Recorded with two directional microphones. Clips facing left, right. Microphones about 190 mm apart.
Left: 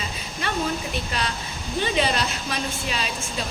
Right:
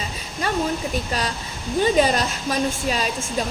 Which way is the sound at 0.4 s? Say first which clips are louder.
Right 4 dB; 40° right (ahead or behind).